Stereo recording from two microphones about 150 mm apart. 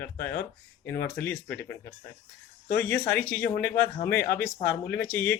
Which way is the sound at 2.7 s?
15° left (ahead or behind).